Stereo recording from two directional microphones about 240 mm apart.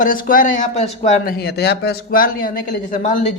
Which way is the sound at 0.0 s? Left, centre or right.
Left.